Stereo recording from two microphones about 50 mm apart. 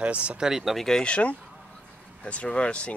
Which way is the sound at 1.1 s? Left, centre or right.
Left.